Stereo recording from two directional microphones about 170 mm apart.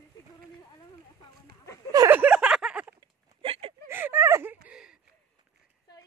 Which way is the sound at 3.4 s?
35° right (ahead or behind).